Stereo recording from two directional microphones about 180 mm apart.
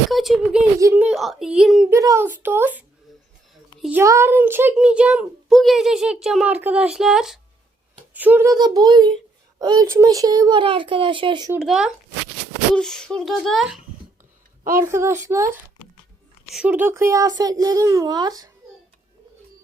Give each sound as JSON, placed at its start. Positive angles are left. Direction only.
{"t": 0.1, "sound": "a sound", "side_deg": 0}
{"t": 0.8, "sound": "a woman's voice", "side_deg": -15}
{"t": 1.0, "sound": "a child's voice", "side_deg": 0}
{"t": 1.9, "sound": "a woman's voice", "side_deg": -15}
{"t": 8.5, "sound": "a child's voice", "side_deg": -20}
{"t": 11.6, "sound": "a child's voice", "side_deg": -5}
{"t": 14.6, "sound": "a woman's voice", "side_deg": -15}
{"t": 16.6, "sound": "a child's voice", "side_deg": -10}